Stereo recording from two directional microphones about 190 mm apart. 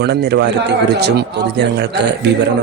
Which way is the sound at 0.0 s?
60° right (ahead or behind).